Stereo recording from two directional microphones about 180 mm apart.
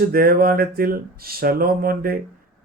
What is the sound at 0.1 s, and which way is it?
Speech, 55° right (ahead or behind).